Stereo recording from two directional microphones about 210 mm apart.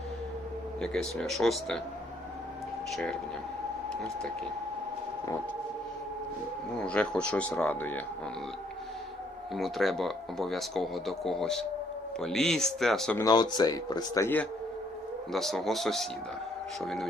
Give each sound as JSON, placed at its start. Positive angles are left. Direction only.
{"t": 0.8, "sound": "speech", "side_deg": 0}
{"t": 2.9, "sound": "speech", "side_deg": 0}
{"t": 6.7, "sound": "speech", "side_deg": 5}
{"t": 9.6, "sound": "speech", "side_deg": 0}
{"t": 13.2, "sound": "speech", "side_deg": 20}
{"t": 15.3, "sound": "speech", "side_deg": 0}